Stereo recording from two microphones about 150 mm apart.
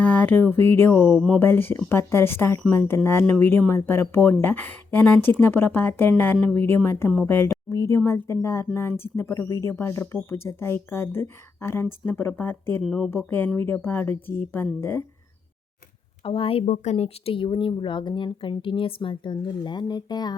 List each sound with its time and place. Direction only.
0.0 s speech: 10° left (ahead or behind)
1.1 s speech: centre (ahead or behind)
1.4 s speech: 15° left (ahead or behind)
12.8 s speech: centre (ahead or behind)
13.6 s speech: 15° left (ahead or behind)
16.2 s speech: 35° left (ahead or behind)